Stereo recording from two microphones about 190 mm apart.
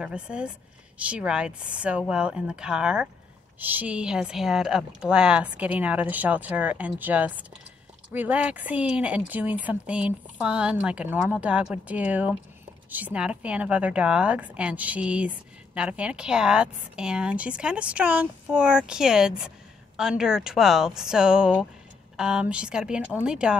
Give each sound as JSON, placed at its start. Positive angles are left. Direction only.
{"t": 0.0, "sound": "a woman's voice", "side_deg": -5}